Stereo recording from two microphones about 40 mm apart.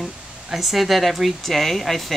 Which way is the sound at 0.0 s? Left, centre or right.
Centre.